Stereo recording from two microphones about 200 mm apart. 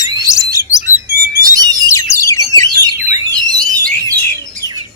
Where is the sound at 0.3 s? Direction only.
15° left (ahead or behind).